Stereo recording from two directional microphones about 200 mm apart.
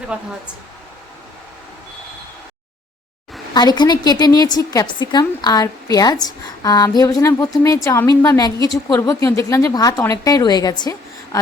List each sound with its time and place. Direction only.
0.1 s speech: 5° right (ahead or behind)
3.5 s a woman's voice: 20° left (ahead or behind)